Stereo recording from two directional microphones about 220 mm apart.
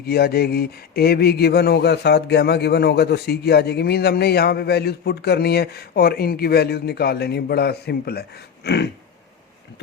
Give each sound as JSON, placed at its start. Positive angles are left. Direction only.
{"t": 0.0, "sound": "speech", "side_deg": 45}